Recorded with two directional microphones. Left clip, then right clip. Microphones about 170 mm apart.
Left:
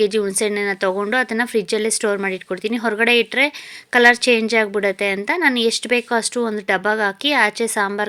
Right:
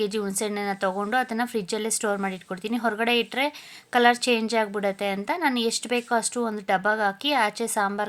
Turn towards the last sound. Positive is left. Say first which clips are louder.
# left 6 dB
turn(degrees=15)  # may be behind; listen again after turning